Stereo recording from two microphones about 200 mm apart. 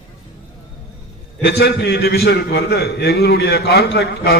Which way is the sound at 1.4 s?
55° left (ahead or behind).